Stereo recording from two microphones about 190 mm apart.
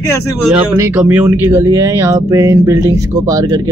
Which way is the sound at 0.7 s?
10° right (ahead or behind).